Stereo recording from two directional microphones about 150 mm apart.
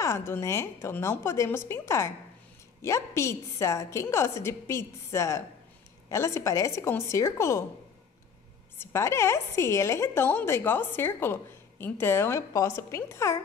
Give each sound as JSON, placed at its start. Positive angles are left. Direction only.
{"t": 0.0, "sound": "a woman's voice", "side_deg": 15}
{"t": 8.7, "sound": "a woman's voice", "side_deg": 15}